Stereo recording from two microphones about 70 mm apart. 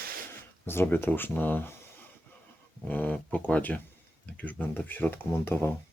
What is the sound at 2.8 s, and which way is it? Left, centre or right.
Speech, left.